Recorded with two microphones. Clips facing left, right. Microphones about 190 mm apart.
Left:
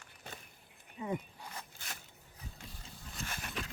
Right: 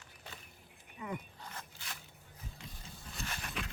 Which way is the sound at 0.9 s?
25° left (ahead or behind).